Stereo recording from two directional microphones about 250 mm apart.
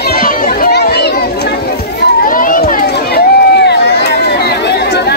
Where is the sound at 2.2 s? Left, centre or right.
Left.